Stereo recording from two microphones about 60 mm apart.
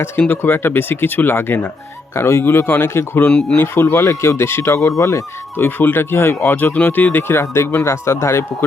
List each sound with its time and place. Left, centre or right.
0.3 s speech: left
2.1 s speech: left
5.5 s speech: left
7.4 s speech: left